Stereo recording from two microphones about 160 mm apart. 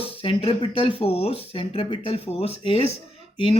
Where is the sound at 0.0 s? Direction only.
35° left (ahead or behind).